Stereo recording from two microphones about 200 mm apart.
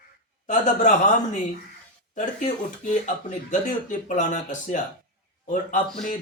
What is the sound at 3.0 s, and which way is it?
Speech, 40° left (ahead or behind).